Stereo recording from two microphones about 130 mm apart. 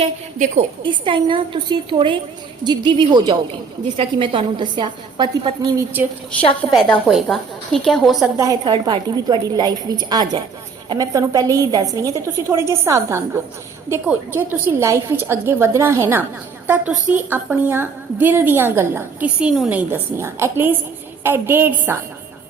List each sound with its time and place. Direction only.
1.0 s a woman's voice: 40° right (ahead or behind)
5.7 s a woman's voice: 15° right (ahead or behind)
6.7 s a woman's voice: 5° left (ahead or behind)
8.4 s a woman's voice: 25° right (ahead or behind)